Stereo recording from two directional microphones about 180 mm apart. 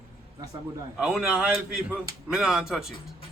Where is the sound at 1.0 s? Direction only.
5° right (ahead or behind).